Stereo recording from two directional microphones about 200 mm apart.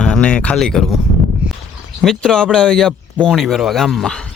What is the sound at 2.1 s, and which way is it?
Speech, 5° left (ahead or behind).